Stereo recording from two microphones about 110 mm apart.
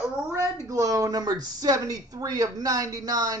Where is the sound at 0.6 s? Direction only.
30° right (ahead or behind).